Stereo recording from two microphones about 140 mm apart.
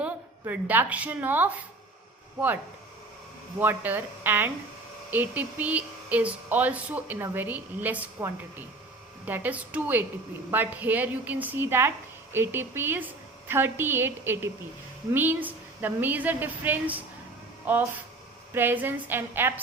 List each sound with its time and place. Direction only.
0.0 s a woman's voice: 10° right (ahead or behind)
3.6 s a woman's voice: 15° right (ahead or behind)